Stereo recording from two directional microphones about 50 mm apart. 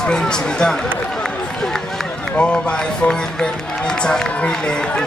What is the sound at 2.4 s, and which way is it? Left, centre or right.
Speech, left.